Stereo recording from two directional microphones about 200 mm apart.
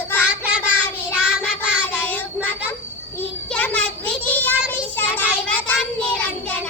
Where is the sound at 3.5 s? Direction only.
5° left (ahead or behind).